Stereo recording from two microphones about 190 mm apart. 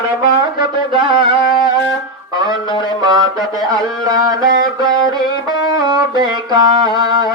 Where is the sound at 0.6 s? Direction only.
25° right (ahead or behind).